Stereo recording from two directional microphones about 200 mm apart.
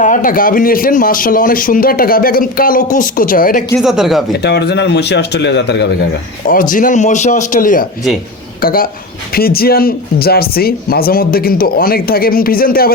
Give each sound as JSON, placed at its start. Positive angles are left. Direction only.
{"t": 0.0, "sound": "speech", "side_deg": 40}
{"t": 3.8, "sound": "speech", "side_deg": 0}
{"t": 4.4, "sound": "a man's voice", "side_deg": 55}
{"t": 6.5, "sound": "speech", "side_deg": 45}